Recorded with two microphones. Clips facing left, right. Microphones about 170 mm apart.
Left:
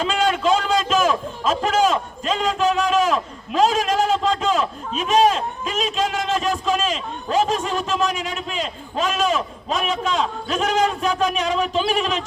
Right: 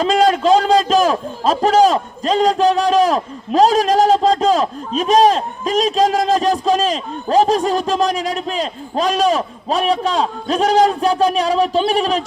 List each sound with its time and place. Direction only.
0.0 s a man's voice: 35° right (ahead or behind)